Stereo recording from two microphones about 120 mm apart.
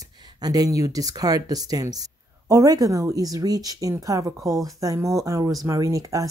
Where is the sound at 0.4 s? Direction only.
30° right (ahead or behind).